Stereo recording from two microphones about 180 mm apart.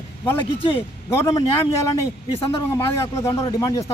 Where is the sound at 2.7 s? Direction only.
15° left (ahead or behind).